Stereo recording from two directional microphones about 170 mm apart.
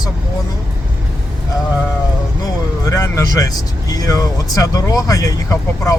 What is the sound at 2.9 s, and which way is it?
Speech, 20° left (ahead or behind).